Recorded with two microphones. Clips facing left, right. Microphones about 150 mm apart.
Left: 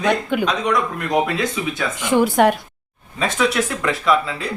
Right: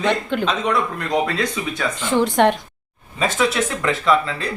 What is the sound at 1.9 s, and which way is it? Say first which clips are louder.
Speech: left 2 dB; 15° left (ahead or behind).